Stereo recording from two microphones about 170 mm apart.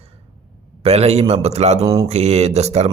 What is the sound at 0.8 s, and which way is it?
Speech, 35° right (ahead or behind).